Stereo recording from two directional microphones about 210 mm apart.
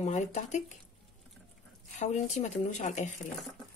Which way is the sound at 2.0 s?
35° left (ahead or behind).